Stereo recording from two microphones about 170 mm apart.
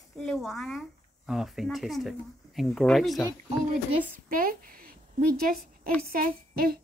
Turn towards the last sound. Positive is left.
turn(degrees=-60)  # may be behind; listen again after turning